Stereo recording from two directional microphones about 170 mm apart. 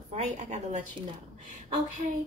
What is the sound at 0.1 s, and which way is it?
Speech, 45° right (ahead or behind).